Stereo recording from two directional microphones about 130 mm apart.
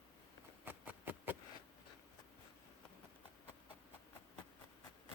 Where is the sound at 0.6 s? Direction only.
15° right (ahead or behind).